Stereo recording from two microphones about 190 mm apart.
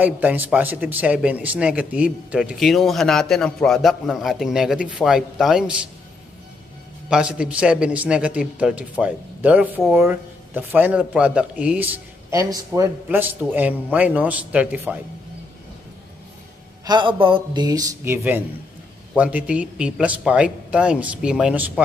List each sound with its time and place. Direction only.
0.0 s speech: 10° right (ahead or behind)
7.1 s speech: 5° right (ahead or behind)
16.8 s a man's voice: 25° right (ahead or behind); by 21.8 s 5° right (ahead or behind)